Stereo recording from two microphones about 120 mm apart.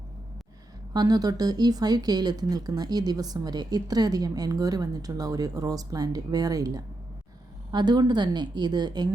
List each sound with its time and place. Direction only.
0.9 s speech: 35° right (ahead or behind)